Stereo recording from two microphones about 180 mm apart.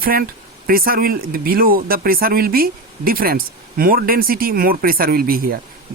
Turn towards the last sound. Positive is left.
turn(degrees=-55)  # may be behind; listen again after turning